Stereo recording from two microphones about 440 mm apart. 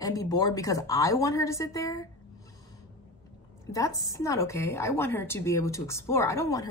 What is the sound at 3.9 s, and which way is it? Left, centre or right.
Speech, left.